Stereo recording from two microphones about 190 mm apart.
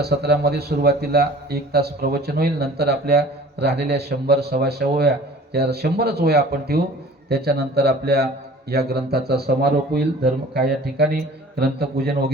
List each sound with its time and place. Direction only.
0.0 s a man's voice: 55° right (ahead or behind)